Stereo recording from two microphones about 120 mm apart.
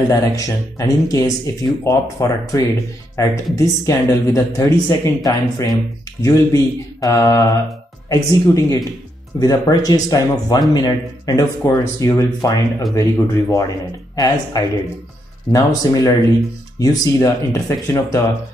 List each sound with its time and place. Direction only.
0.1 s speech: 30° left (ahead or behind)